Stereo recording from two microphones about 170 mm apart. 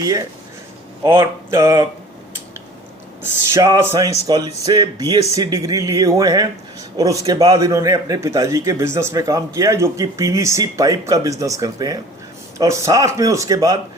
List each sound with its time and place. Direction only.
0.0 s a man's voice: 20° right (ahead or behind)
3.5 s a man's voice: 20° right (ahead or behind)